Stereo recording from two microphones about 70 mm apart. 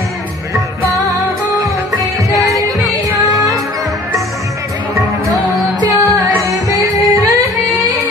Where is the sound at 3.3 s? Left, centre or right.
Right.